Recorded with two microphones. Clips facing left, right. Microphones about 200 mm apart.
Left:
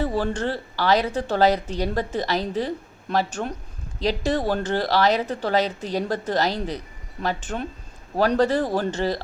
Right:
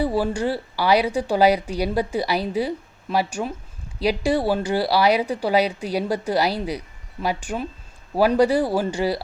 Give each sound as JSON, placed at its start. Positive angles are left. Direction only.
{"t": 0.0, "sound": "speech", "side_deg": -10}